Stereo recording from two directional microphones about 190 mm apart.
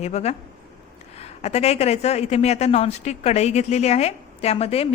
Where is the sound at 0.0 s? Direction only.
35° left (ahead or behind).